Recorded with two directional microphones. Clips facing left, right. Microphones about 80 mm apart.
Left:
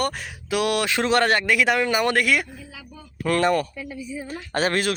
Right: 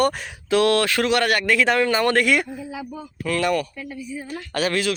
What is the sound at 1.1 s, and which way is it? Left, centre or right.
Speech, left.